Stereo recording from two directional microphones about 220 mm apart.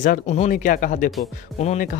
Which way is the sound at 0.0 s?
35° left (ahead or behind).